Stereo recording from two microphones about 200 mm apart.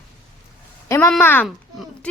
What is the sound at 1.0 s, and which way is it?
Speech, 5° left (ahead or behind).